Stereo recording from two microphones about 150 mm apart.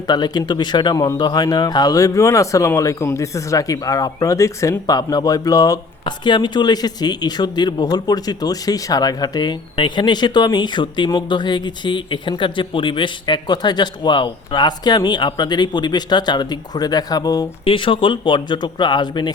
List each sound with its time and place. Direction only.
0.1 s speech: 30° left (ahead or behind)